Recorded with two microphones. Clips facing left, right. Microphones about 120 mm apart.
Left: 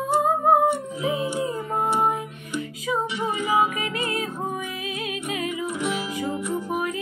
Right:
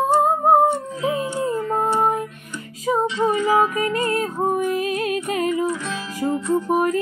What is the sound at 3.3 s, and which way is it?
Music, 15° left (ahead or behind).